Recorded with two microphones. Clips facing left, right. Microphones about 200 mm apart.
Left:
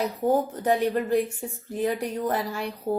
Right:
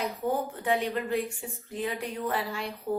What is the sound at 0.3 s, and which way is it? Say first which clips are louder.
Speech: left 6 dB; 40° left (ahead or behind).